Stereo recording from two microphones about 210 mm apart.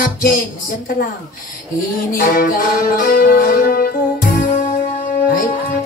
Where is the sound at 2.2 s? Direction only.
45° left (ahead or behind).